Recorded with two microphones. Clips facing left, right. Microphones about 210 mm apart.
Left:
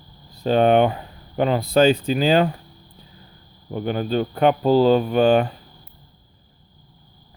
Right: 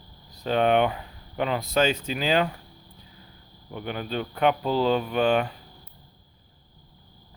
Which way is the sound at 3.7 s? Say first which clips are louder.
Left 8 dB; 35° left (ahead or behind).